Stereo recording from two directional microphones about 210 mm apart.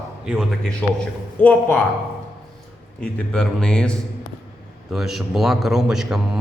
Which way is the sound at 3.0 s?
5° left (ahead or behind).